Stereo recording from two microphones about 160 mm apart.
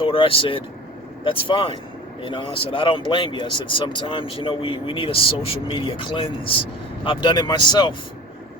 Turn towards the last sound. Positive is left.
turn(degrees=30)  # may be behind; listen again after turning